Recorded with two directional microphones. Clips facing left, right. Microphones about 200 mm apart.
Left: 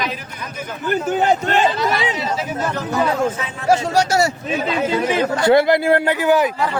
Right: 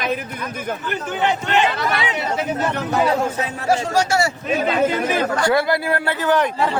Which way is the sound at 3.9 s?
40° left (ahead or behind).